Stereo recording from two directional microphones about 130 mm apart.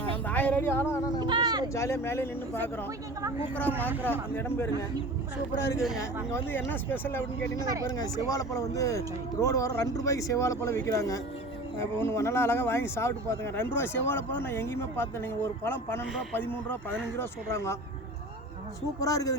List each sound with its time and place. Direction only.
0.3 s a woman's voice: 10° left (ahead or behind)
1.2 s a sound: 35° right (ahead or behind)
1.7 s speech: 20° left (ahead or behind)
3.8 s speech: 15° left (ahead or behind)
6.3 s speech: 15° left (ahead or behind)
7.9 s speech: 30° left (ahead or behind)
18.9 s speech: 25° left (ahead or behind)